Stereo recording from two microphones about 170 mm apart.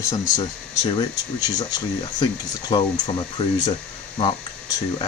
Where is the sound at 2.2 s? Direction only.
25° left (ahead or behind).